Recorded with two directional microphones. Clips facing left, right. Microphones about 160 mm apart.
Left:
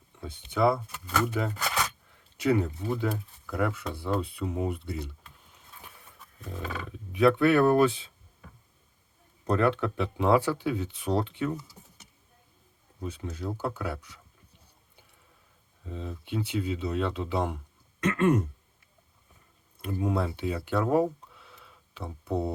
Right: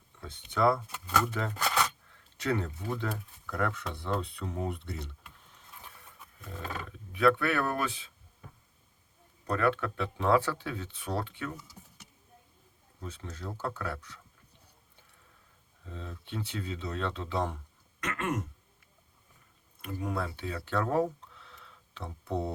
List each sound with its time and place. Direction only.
0.2 s speech: 10° left (ahead or behind)
7.1 s speech: 20° left (ahead or behind)
9.5 s speech: 25° left (ahead or behind)
13.0 s speech: 10° left (ahead or behind)
15.9 s speech: 15° left (ahead or behind)
18.0 s throat clearing: 30° left (ahead or behind)
19.8 s speech: 25° left (ahead or behind); by 22.5 s 5° left (ahead or behind)